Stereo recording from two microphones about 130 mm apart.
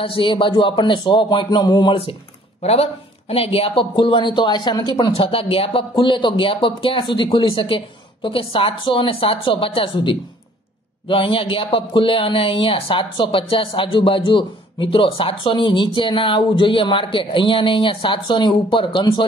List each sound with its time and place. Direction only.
0.0 s speech: 40° left (ahead or behind)
2.6 s speech: 55° left (ahead or behind); by 5.1 s 35° left (ahead or behind)
5.1 s speech: 45° left (ahead or behind)